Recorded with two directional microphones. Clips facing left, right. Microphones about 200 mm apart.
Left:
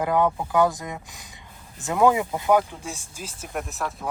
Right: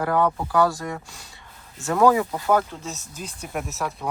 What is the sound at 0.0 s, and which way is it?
Speech, 20° left (ahead or behind).